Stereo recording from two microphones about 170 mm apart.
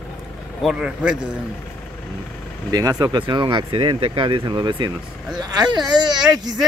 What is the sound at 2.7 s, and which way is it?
Speech, 20° right (ahead or behind).